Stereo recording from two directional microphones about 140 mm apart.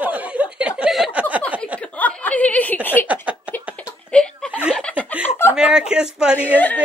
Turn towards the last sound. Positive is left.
turn(degrees=10)  # may be behind; listen again after turning